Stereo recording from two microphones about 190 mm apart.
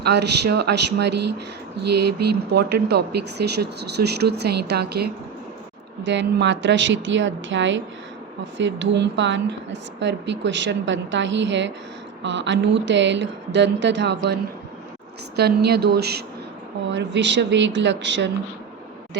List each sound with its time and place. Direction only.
0.0 s speech: 60° right (ahead or behind)
6.0 s a woman's voice: 70° right (ahead or behind)
15.4 s speech: 55° right (ahead or behind)
16.9 s a woman's voice: 70° right (ahead or behind)